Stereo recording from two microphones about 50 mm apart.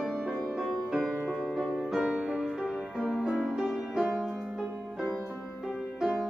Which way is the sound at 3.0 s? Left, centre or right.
Centre.